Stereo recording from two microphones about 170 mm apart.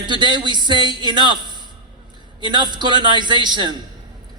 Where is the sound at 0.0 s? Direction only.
25° right (ahead or behind).